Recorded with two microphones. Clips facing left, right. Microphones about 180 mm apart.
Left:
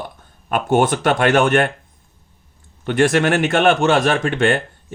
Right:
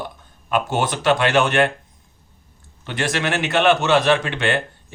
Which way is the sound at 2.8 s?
50° left (ahead or behind).